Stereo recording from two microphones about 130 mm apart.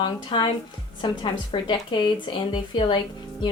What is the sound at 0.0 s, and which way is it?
A woman's voice, 40° left (ahead or behind).